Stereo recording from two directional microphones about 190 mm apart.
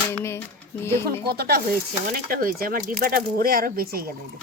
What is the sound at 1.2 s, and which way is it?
Speech, 55° right (ahead or behind).